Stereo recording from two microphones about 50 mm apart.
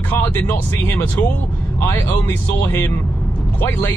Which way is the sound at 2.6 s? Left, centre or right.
Left.